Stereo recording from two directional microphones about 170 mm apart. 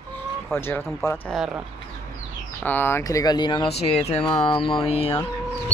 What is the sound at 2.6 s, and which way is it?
Speech, 10° left (ahead or behind).